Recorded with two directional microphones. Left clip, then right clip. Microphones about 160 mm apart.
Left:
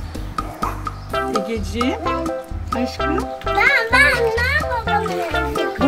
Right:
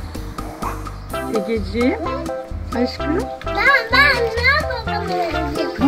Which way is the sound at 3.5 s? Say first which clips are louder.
Even; 15° right (ahead or behind).